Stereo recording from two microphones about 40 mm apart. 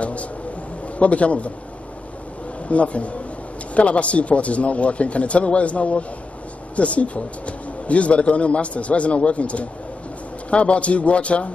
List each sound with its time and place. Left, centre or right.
0.0 s a sound: left
0.9 s speech: left
2.7 s speech: left